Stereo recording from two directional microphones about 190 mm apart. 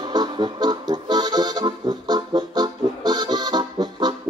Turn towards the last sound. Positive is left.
turn(degrees=-20)  # may be behind; listen again after turning